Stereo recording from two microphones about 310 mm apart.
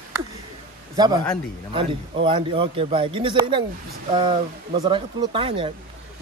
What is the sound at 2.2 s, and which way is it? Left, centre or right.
Speech, centre.